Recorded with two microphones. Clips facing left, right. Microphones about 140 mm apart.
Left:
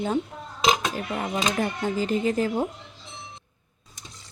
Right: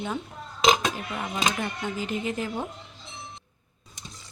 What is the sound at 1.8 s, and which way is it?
Speech, 35° left (ahead or behind).